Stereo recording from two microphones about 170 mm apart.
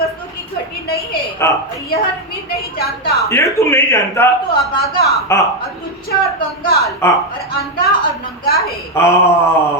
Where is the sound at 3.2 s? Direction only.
15° left (ahead or behind).